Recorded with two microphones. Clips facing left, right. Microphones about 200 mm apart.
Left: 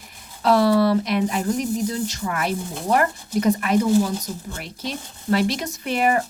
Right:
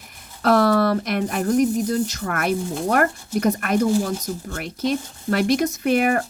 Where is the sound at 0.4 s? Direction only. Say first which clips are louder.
Even; 50° right (ahead or behind).